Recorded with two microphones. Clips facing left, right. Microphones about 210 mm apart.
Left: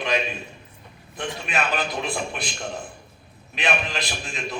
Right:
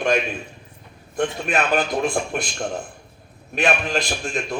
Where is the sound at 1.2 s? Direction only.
50° right (ahead or behind).